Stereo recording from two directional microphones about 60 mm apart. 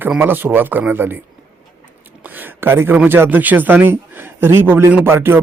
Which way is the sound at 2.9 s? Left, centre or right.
Right.